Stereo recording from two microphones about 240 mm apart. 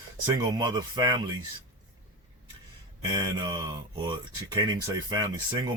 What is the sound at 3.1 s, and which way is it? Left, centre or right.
Speech, centre.